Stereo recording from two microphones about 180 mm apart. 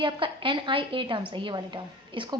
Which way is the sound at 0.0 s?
30° right (ahead or behind).